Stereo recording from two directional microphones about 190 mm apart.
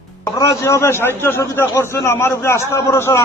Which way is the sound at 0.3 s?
15° left (ahead or behind).